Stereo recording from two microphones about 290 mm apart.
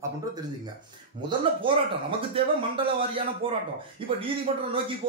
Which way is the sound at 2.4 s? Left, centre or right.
Centre.